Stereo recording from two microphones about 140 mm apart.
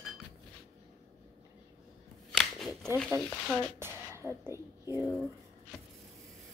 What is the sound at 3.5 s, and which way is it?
A woman's voice, 20° right (ahead or behind).